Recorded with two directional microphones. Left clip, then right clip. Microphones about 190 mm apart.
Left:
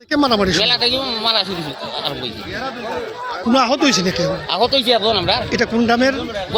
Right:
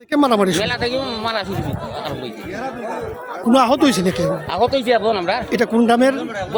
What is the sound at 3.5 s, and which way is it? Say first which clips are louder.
Speech: right 1 dB; 25° right (ahead or behind).